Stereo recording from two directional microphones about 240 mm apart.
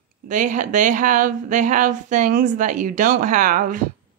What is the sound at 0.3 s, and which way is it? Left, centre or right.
A woman's voice, right.